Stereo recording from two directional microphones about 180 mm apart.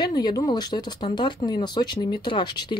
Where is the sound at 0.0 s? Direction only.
20° left (ahead or behind).